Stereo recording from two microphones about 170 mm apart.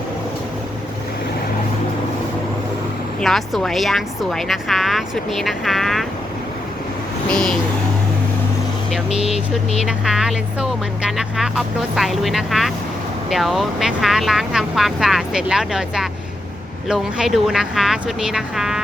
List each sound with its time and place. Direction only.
3.2 s speech: centre (ahead or behind)
7.3 s vehicle: 5° left (ahead or behind)
9.0 s vehicle: 40° left (ahead or behind)
9.8 s speech: 5° right (ahead or behind)